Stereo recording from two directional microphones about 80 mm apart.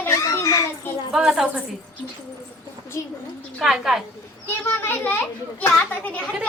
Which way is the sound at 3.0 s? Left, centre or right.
Left.